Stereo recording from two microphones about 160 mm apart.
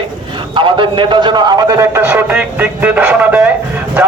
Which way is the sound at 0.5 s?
30° right (ahead or behind).